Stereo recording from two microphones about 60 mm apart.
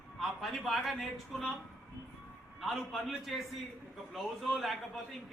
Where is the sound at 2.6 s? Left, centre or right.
Centre.